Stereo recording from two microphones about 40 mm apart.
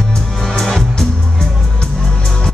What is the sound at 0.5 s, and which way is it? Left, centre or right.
Music, centre.